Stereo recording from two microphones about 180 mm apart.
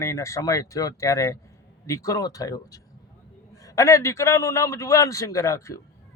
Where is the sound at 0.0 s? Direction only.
15° left (ahead or behind).